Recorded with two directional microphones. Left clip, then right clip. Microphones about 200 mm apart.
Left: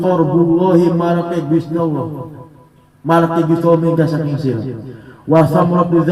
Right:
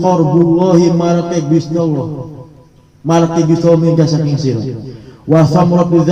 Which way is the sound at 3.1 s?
35° left (ahead or behind).